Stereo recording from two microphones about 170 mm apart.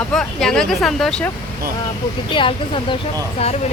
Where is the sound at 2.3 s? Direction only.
30° left (ahead or behind).